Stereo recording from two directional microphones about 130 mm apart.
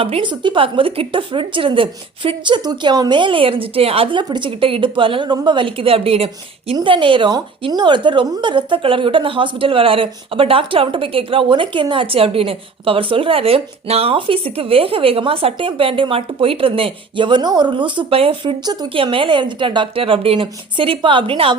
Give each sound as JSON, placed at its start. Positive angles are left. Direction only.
{"t": 0.0, "sound": "a woman's voice", "side_deg": -45}